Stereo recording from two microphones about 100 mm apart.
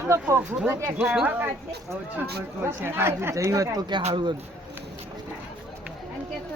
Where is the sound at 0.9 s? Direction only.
10° right (ahead or behind).